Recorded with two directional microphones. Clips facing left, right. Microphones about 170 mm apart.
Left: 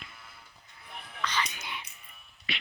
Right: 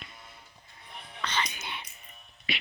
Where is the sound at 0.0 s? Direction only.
25° right (ahead or behind).